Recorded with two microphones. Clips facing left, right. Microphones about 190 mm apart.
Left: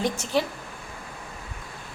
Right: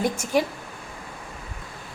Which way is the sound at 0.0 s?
10° right (ahead or behind).